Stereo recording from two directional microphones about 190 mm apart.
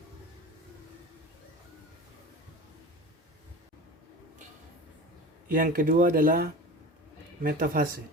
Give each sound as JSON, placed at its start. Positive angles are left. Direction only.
{"t": 5.5, "sound": "speech", "side_deg": -45}